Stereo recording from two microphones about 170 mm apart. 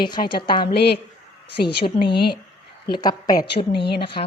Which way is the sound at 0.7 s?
75° left (ahead or behind).